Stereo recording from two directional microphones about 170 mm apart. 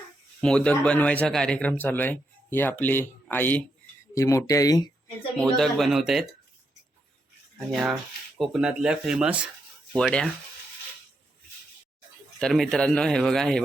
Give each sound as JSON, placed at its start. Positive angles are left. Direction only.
{"t": 0.4, "sound": "speech", "side_deg": 5}
{"t": 5.4, "sound": "speech", "side_deg": 0}
{"t": 7.7, "sound": "speech", "side_deg": 0}
{"t": 9.9, "sound": "speech", "side_deg": 5}
{"t": 12.4, "sound": "speech", "side_deg": 5}